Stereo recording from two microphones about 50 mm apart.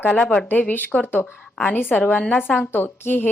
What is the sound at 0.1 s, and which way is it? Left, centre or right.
Speech, left.